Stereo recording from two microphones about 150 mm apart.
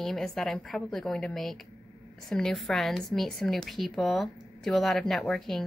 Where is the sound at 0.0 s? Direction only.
Centre (ahead or behind).